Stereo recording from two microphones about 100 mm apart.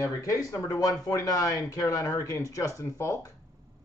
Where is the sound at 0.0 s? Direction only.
35° left (ahead or behind).